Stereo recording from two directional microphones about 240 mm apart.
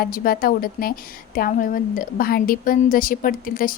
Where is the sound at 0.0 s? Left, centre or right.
Left.